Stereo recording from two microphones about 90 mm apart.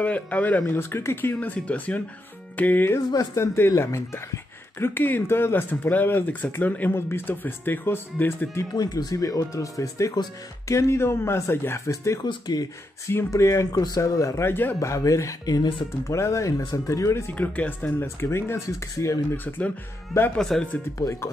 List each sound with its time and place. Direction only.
0.0 s speech: 15° left (ahead or behind)
0.7 s speech: 30° left (ahead or behind)
1.3 s speech: 15° left (ahead or behind)
8.7 s speech: 45° left (ahead or behind)
12.2 s speech: 50° left (ahead or behind)
13.3 s speech: 35° left (ahead or behind)
17.3 s speech: 20° left (ahead or behind)
19.3 s speech: 20° left (ahead or behind)
20.3 s speech: 5° left (ahead or behind)
21.0 s speech: 30° left (ahead or behind)